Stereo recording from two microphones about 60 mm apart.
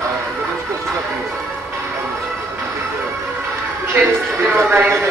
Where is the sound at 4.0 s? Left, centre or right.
Right.